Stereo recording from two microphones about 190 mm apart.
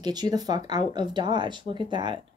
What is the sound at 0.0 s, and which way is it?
Speech, 20° right (ahead or behind).